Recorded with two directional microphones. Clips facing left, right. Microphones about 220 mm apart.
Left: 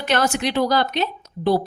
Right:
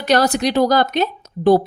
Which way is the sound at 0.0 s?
35° right (ahead or behind).